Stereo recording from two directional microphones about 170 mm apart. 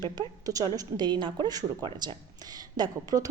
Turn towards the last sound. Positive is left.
turn(degrees=-20)  # may be behind; listen again after turning